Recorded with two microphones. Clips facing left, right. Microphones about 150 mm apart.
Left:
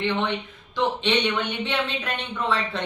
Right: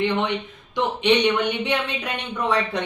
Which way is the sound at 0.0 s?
15° right (ahead or behind).